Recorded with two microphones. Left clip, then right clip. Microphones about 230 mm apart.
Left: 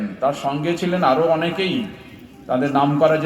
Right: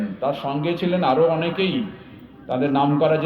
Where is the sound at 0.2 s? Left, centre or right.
Left.